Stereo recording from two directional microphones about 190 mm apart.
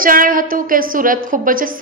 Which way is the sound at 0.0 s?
45° right (ahead or behind).